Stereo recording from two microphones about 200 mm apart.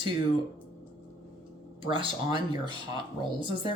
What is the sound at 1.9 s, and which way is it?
Speech, 25° right (ahead or behind).